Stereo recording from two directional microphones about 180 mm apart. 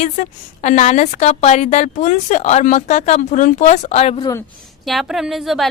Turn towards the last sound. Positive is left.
turn(degrees=0)  # may be behind; listen again after turning